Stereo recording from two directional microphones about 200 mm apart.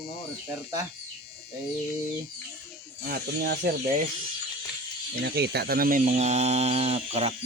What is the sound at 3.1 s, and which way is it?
Speech, 55° right (ahead or behind).